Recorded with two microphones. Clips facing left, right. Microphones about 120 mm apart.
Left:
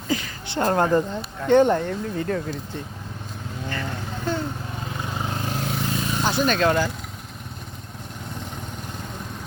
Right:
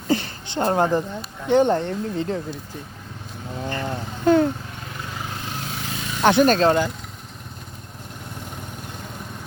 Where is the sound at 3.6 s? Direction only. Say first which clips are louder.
Right 3 dB; 25° right (ahead or behind).